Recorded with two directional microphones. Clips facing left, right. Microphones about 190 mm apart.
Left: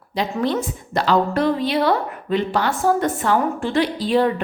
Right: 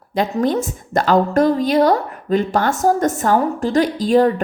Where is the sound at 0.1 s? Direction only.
45° right (ahead or behind).